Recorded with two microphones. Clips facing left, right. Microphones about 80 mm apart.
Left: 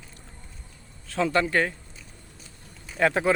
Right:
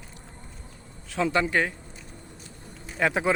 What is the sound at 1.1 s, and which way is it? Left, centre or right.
Speech, centre.